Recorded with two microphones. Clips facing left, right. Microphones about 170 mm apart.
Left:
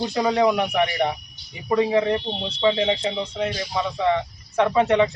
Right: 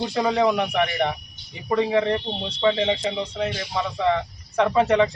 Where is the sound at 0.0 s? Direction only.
Centre (ahead or behind).